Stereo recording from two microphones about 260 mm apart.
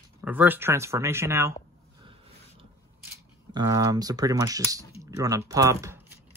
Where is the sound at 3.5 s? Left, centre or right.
Centre.